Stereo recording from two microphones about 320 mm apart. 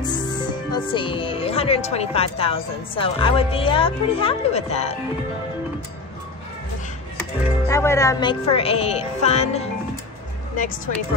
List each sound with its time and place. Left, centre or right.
0.0 s speech: centre
7.2 s speech: centre